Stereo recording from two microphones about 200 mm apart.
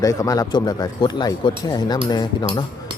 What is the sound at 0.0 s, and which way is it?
Speech, 15° left (ahead or behind).